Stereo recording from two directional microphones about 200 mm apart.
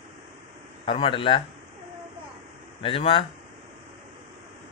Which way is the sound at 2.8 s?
25° left (ahead or behind).